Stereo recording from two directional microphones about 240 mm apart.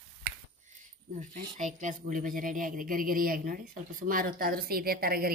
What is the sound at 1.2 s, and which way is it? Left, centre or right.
Speech, right.